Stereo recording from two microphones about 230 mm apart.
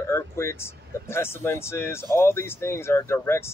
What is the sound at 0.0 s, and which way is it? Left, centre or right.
Speech, centre.